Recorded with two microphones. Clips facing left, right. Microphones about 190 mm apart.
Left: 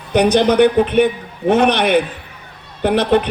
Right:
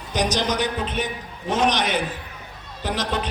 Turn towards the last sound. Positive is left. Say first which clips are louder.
# left 11 dB
turn(degrees=60)  # may be behind; listen again after turning